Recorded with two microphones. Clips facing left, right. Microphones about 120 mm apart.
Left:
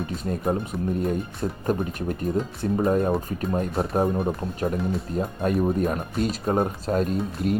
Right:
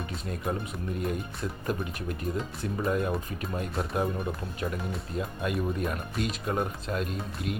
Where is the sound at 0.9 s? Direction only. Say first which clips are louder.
Left 3 dB; 35° left (ahead or behind).